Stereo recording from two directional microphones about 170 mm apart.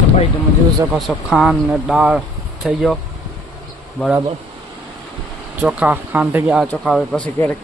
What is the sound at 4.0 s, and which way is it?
Speech, centre (ahead or behind).